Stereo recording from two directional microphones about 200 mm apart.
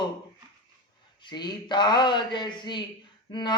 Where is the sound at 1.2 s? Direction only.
20° left (ahead or behind).